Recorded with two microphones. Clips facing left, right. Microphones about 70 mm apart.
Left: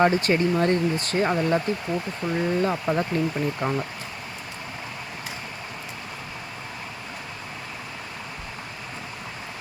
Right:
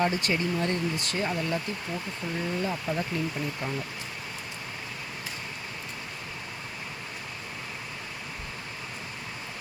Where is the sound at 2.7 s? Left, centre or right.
Left.